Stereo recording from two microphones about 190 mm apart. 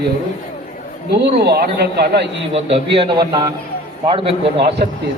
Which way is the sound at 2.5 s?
30° right (ahead or behind).